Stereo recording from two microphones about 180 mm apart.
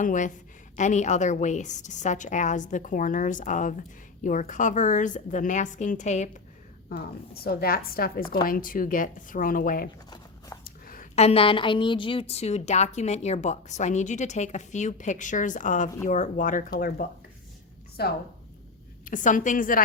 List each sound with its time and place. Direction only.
0.0 s a woman's voice: 45° left (ahead or behind)
7.4 s a woman's voice: 60° left (ahead or behind)
19.0 s a woman's voice: 45° left (ahead or behind)